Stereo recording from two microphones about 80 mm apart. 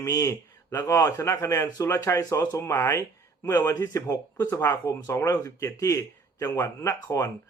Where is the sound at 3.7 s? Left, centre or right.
Left.